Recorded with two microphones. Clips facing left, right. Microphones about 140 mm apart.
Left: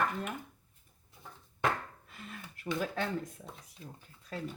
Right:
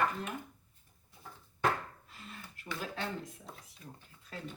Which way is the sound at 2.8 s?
50° left (ahead or behind).